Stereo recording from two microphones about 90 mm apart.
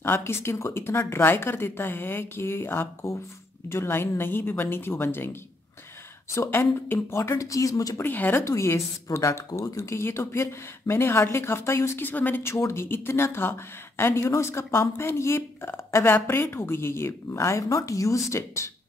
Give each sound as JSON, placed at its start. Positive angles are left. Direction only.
{"t": 0.0, "sound": "a woman's voice", "side_deg": 25}
{"t": 6.3, "sound": "speech", "side_deg": 30}
{"t": 8.0, "sound": "a woman's voice", "side_deg": 20}
{"t": 8.5, "sound": "a woman's voice", "side_deg": 35}